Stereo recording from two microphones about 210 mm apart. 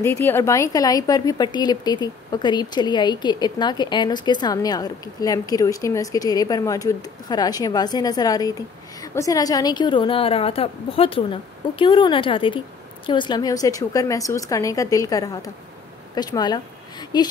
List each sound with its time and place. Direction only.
0.0 s a woman's voice: 10° left (ahead or behind)